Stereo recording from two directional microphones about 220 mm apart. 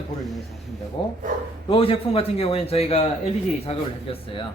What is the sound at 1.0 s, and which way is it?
A man's voice, 25° left (ahead or behind).